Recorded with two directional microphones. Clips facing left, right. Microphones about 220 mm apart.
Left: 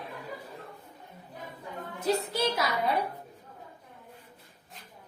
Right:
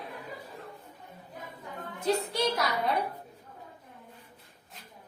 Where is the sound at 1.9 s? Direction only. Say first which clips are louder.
Even; centre (ahead or behind).